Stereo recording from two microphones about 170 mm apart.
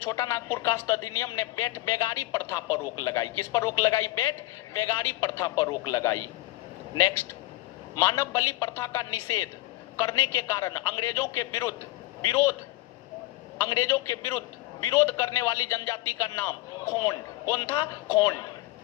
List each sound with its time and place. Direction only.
0.0 s a man's voice: 15° left (ahead or behind)
13.6 s a man's voice: 15° left (ahead or behind)